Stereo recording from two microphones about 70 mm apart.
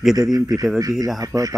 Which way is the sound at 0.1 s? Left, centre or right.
Right.